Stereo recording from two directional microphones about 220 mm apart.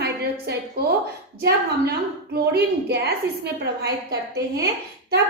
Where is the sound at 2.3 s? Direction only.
45° right (ahead or behind).